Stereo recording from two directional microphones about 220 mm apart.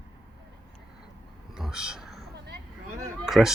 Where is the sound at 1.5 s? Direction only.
5° right (ahead or behind).